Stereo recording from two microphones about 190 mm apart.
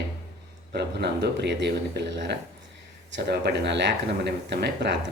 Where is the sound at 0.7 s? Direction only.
60° right (ahead or behind).